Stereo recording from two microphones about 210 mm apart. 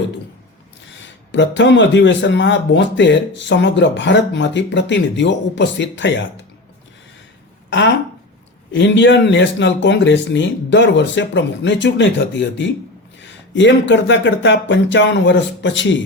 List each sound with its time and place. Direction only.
1.3 s speech: 60° left (ahead or behind)
8.7 s speech: 60° left (ahead or behind)